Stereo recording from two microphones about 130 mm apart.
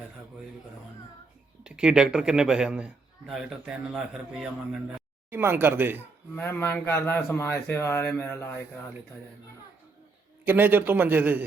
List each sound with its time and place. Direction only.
1.6 s a man's voice: 5° right (ahead or behind)
5.3 s a man's voice: 15° right (ahead or behind)
6.0 s speech: 15° left (ahead or behind)
10.4 s a man's voice: 15° right (ahead or behind)